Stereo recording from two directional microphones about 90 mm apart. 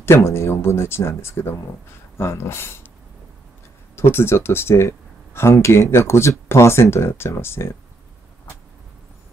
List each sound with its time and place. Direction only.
0.0 s speech: 30° left (ahead or behind)
3.9 s speech: 25° left (ahead or behind)